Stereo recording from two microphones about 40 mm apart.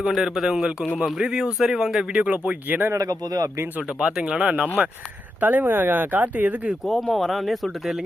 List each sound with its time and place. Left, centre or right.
0.1 s a man's voice: centre
2.1 s speech: right
2.6 s speech: right
3.8 s speech: right
5.4 s speech: right
6.8 s speech: centre